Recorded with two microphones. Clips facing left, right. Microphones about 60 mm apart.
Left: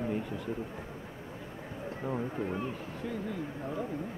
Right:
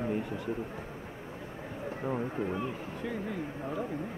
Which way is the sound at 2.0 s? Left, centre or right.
Centre.